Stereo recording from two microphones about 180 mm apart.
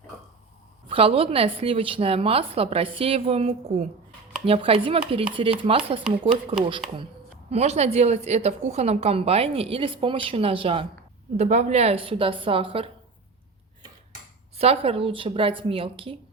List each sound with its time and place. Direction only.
0.9 s a woman's voice: 30° right (ahead or behind)
14.6 s a woman's voice: 35° right (ahead or behind)